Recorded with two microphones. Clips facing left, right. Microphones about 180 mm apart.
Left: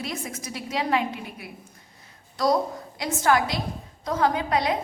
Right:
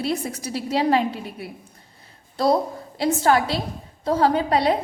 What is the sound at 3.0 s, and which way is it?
A woman's voice, 30° right (ahead or behind).